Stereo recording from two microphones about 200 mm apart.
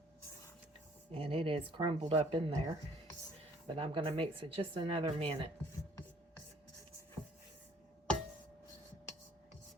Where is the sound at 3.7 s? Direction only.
25° right (ahead or behind).